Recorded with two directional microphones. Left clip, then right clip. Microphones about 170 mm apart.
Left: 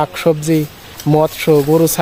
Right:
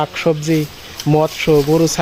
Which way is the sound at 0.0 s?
20° left (ahead or behind).